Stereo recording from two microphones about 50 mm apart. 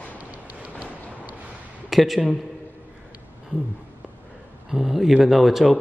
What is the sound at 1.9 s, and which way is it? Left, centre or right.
Speech, centre.